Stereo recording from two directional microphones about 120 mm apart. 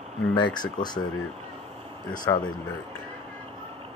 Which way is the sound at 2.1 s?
35° left (ahead or behind).